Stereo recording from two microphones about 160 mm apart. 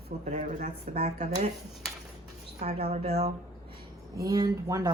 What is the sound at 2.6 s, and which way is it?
Speech, 45° right (ahead or behind).